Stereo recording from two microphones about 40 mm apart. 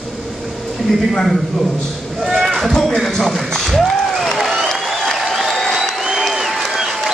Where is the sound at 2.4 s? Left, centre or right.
Centre.